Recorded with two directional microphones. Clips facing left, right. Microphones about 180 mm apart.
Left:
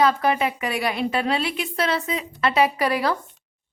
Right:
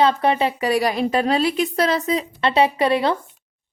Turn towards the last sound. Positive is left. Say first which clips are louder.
# right 3 dB
turn(degrees=-25)  # may be behind; listen again after turning